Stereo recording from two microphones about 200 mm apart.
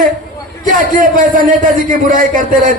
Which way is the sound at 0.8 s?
40° right (ahead or behind).